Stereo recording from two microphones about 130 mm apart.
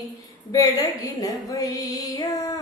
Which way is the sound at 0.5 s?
25° left (ahead or behind).